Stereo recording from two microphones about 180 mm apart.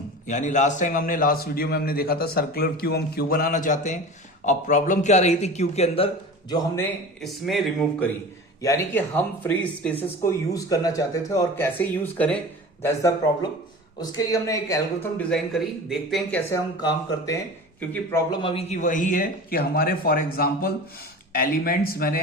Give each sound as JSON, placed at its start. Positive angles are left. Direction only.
{"t": 0.3, "sound": "a man's voice", "side_deg": 45}
{"t": 7.2, "sound": "speech", "side_deg": 0}
{"t": 15.2, "sound": "speech", "side_deg": 0}
{"t": 16.5, "sound": "speech", "side_deg": 20}
{"t": 18.3, "sound": "a man's voice", "side_deg": 30}
{"t": 18.8, "sound": "a man's voice", "side_deg": 45}